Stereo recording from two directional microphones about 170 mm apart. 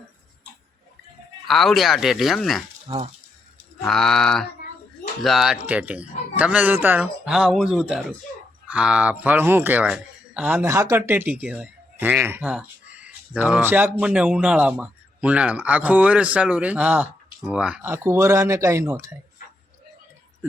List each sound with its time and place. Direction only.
1.5 s speech: centre (ahead or behind)
2.8 s speech: 30° right (ahead or behind)
3.8 s speech: centre (ahead or behind); by 19.1 s 15° right (ahead or behind)